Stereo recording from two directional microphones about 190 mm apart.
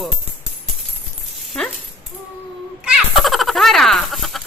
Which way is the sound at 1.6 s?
5° left (ahead or behind).